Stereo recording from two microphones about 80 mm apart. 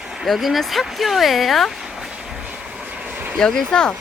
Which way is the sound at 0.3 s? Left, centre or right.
Centre.